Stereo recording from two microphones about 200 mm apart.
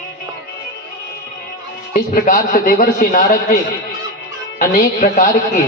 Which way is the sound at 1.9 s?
40° left (ahead or behind).